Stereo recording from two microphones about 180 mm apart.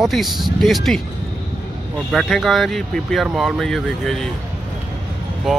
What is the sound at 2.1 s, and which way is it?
Speech, centre (ahead or behind).